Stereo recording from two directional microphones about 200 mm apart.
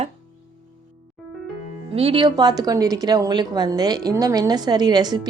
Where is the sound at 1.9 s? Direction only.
30° right (ahead or behind).